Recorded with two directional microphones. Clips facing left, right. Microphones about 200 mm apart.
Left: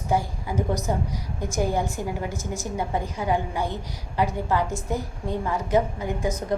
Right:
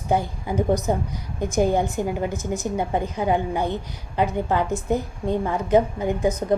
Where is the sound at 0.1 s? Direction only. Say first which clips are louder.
Right 2 dB; 20° right (ahead or behind).